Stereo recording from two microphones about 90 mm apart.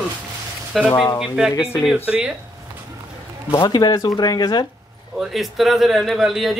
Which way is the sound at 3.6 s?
50° left (ahead or behind).